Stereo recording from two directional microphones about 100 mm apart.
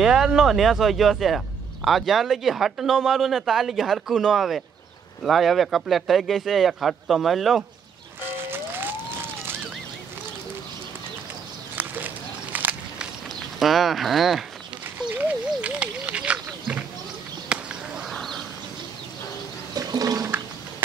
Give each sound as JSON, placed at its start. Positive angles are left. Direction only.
{"t": 0.0, "sound": "speech", "side_deg": -5}
{"t": 8.2, "sound": "music", "side_deg": -20}
{"t": 11.7, "sound": "bird", "side_deg": -20}
{"t": 12.5, "sound": "walk", "side_deg": -15}
{"t": 13.6, "sound": "speech", "side_deg": 0}
{"t": 15.1, "sound": "a sound", "side_deg": -15}
{"t": 19.7, "sound": "a sound", "side_deg": -40}